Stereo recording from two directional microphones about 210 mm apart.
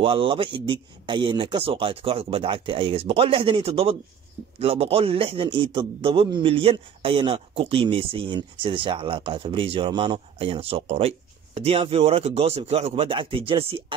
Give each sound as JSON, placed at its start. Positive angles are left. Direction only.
{"t": 0.0, "sound": "a man's voice", "side_deg": -25}